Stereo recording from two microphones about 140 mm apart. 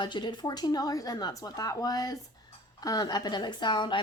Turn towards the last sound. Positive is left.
turn(degrees=35)  # may be behind; listen again after turning